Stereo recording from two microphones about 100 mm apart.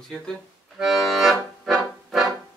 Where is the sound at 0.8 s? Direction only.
Centre (ahead or behind).